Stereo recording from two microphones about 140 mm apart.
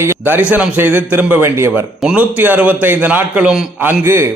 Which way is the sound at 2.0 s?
5° right (ahead or behind).